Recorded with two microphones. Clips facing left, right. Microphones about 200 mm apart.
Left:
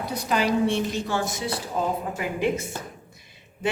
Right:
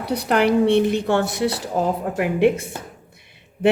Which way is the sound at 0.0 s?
65° right (ahead or behind).